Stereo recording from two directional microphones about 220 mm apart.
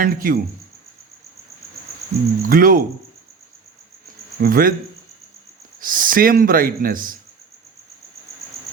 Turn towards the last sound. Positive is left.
turn(degrees=-40)  # may be behind; listen again after turning